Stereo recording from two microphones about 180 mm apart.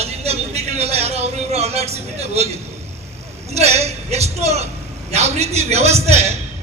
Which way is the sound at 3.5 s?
35° right (ahead or behind).